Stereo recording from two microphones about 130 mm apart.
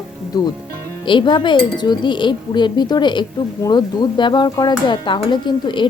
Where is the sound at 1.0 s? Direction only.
40° left (ahead or behind).